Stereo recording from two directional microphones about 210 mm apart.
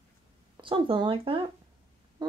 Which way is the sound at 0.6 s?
25° right (ahead or behind).